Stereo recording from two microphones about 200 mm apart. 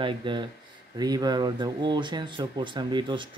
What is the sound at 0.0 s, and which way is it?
Speech, 25° right (ahead or behind).